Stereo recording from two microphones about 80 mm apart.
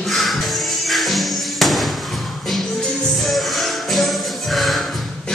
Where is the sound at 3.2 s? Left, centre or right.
Centre.